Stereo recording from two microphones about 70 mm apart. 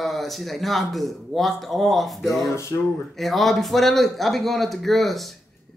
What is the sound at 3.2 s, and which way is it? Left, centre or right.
A man's voice, centre.